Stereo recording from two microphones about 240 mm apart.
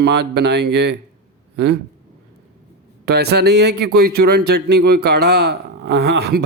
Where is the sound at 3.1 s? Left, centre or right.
Right.